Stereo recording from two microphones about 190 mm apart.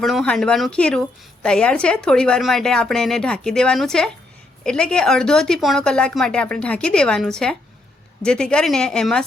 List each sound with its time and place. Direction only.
0.0 s a woman's voice: centre (ahead or behind)